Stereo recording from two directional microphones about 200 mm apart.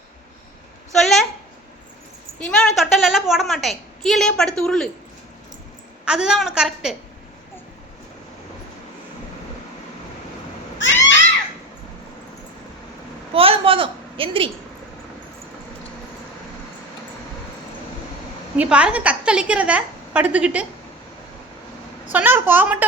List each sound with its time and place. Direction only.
0.9 s a sound: centre (ahead or behind)
2.4 s a woman's voice: centre (ahead or behind)
6.1 s a woman's voice: 5° right (ahead or behind)
13.3 s a sound: 30° right (ahead or behind)
18.5 s a woman's voice: 5° right (ahead or behind)
22.1 s a woman's voice: 10° right (ahead or behind)